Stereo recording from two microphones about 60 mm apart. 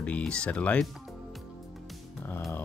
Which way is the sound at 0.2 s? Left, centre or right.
Centre.